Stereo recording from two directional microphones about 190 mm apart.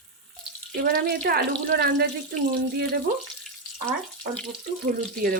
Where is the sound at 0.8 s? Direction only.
55° right (ahead or behind).